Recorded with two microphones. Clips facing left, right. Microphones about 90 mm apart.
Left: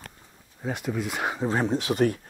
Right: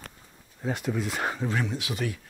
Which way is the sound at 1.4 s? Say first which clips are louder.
Left 5 dB; 30° left (ahead or behind).